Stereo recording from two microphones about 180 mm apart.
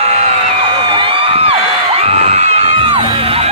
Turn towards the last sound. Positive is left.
turn(degrees=-30)  # may be behind; listen again after turning